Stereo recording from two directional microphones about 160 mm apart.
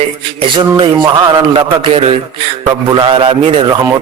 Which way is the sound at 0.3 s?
30° right (ahead or behind).